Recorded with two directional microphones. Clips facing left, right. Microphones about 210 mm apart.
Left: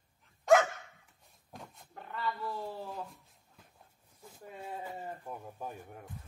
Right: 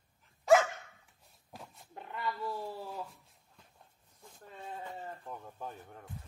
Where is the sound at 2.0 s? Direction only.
15° right (ahead or behind).